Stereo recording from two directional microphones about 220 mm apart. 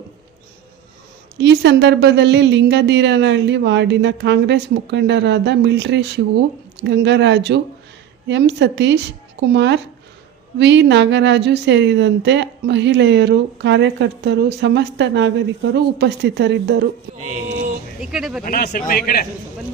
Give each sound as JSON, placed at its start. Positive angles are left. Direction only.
{"t": 1.4, "sound": "a woman's voice", "side_deg": -50}
{"t": 17.5, "sound": "vehicle", "side_deg": -40}
{"t": 18.0, "sound": "speech", "side_deg": -5}
{"t": 18.4, "sound": "a man's voice", "side_deg": 45}